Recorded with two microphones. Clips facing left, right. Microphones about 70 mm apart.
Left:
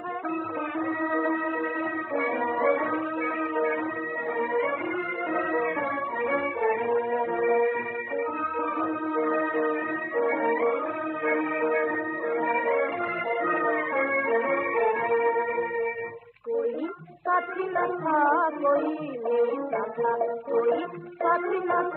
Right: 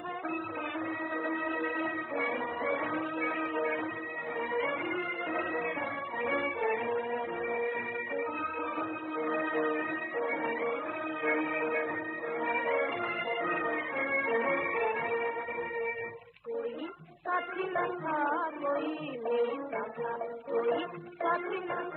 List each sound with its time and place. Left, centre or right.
0.7 s music: left
5.3 s music: left
7.2 s music: left
8.8 s music: left
10.4 s music: left
11.3 s music: left
17.3 s child singing: left
19.2 s music: left
20.0 s music: left
21.3 s a sound: left